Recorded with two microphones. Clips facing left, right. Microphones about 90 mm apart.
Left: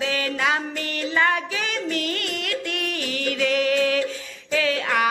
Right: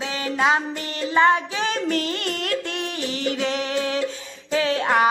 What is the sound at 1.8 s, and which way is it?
Music, 35° right (ahead or behind).